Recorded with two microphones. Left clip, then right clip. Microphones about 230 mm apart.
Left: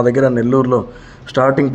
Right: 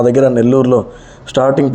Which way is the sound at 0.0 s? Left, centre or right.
Centre.